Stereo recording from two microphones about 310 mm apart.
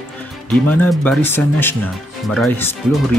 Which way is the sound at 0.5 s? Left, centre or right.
Centre.